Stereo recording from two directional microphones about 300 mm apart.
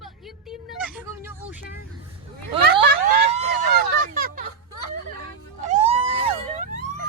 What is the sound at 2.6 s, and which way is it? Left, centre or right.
Vehicle, right.